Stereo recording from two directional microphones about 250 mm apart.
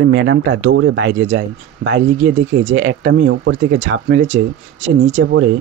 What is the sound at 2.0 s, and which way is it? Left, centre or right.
Speech, right.